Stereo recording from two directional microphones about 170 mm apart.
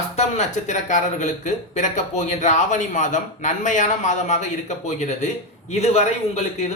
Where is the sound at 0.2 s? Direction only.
45° left (ahead or behind).